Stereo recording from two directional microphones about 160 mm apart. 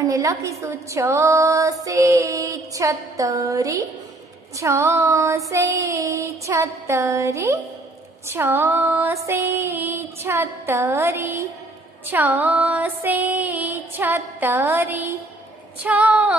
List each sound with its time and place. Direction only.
0.0 s child singing: 20° right (ahead or behind)
8.3 s female singing: 15° right (ahead or behind)